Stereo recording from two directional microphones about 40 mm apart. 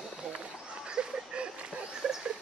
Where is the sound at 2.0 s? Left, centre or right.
Centre.